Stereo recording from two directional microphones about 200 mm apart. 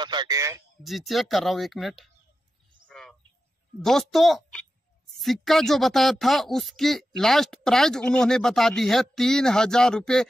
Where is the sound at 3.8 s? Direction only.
Centre (ahead or behind).